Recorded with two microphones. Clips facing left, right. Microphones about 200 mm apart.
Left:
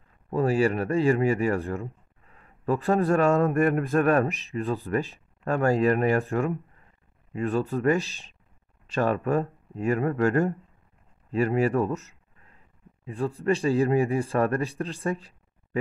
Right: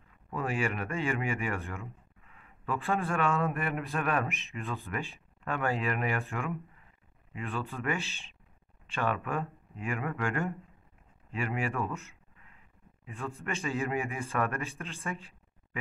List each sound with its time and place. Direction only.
0.3 s speech: 35° left (ahead or behind)